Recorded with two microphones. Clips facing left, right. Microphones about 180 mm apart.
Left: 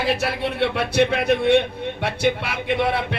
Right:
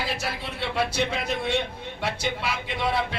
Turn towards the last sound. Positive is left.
turn(degrees=60)  # may be behind; listen again after turning